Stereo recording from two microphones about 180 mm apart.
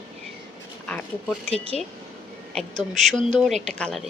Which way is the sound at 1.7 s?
40° right (ahead or behind).